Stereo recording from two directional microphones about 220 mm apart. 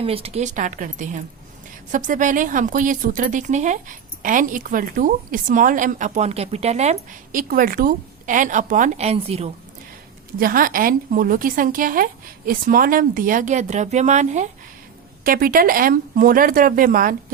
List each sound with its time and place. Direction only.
0.0 s a woman's voice: 25° right (ahead or behind)
10.4 s a woman's voice: 40° right (ahead or behind)